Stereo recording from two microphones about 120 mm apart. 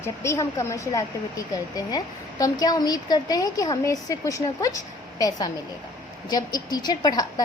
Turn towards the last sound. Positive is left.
turn(degrees=35)  # may be behind; listen again after turning